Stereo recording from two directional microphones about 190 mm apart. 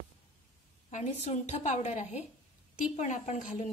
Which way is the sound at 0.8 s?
35° left (ahead or behind).